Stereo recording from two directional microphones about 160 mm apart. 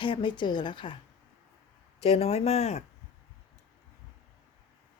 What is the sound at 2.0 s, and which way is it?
Speech, 40° left (ahead or behind).